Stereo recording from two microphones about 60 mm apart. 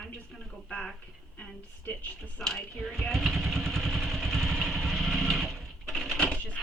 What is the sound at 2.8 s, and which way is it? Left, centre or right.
Vehicle, centre.